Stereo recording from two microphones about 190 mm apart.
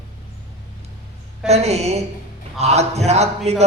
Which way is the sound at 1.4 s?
35° right (ahead or behind).